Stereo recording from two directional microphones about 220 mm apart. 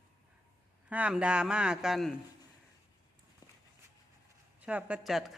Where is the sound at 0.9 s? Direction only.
5° right (ahead or behind).